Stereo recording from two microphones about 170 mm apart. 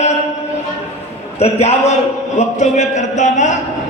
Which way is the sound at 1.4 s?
40° left (ahead or behind).